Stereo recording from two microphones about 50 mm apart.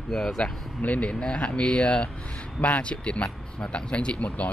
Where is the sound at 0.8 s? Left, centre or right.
Left.